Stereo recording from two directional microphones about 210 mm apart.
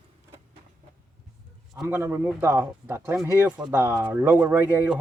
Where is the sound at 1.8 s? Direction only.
10° right (ahead or behind).